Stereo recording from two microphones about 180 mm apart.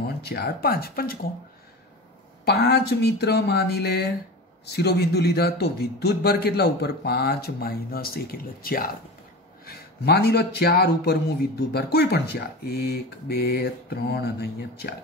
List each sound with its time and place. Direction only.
0.3 s a man's voice: 60° left (ahead or behind)
2.4 s a man's voice: 65° left (ahead or behind)